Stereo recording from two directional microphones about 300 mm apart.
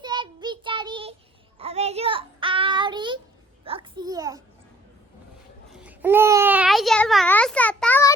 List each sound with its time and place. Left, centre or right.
0.0 s child singing: centre
3.6 s a sound: centre
5.7 s babbling: centre